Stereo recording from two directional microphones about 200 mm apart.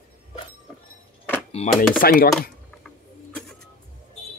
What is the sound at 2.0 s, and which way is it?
Chopping, 45° left (ahead or behind).